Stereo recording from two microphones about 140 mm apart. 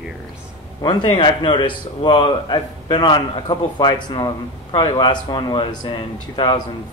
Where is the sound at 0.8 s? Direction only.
35° left (ahead or behind).